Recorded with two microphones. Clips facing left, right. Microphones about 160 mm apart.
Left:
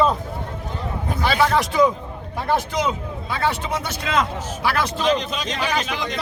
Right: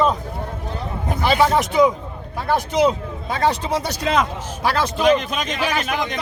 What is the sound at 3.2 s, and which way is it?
Speech, 40° right (ahead or behind).